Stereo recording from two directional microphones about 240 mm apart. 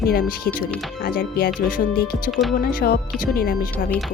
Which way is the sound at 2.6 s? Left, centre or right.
Left.